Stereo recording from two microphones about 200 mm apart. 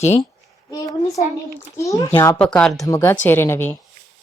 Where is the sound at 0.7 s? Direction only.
15° left (ahead or behind).